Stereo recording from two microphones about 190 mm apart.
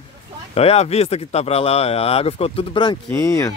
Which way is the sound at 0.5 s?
30° left (ahead or behind).